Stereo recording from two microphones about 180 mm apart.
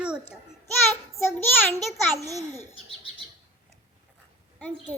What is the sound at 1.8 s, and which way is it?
Speech, centre (ahead or behind).